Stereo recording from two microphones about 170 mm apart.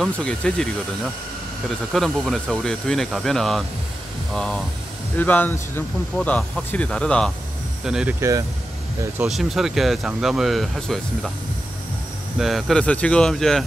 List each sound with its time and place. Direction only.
0.0 s speech: 5° left (ahead or behind)
1.7 s speech: centre (ahead or behind)
8.2 s speech: 20° right (ahead or behind)
9.2 s speech: centre (ahead or behind)
12.4 s speech: centre (ahead or behind)